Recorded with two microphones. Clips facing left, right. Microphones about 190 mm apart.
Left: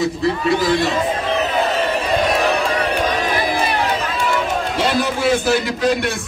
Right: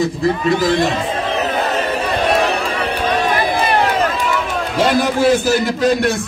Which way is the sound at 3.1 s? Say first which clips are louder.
Right 3 dB; 55° right (ahead or behind).